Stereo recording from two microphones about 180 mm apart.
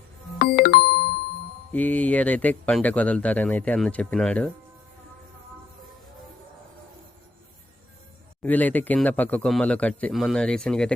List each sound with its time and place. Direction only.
0.3 s music: 60° left (ahead or behind)
1.7 s speech: 10° left (ahead or behind)
8.4 s speech: 10° left (ahead or behind)